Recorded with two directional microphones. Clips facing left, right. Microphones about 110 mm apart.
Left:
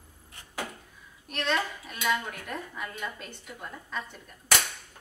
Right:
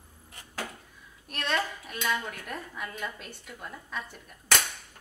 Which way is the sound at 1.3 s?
Centre (ahead or behind).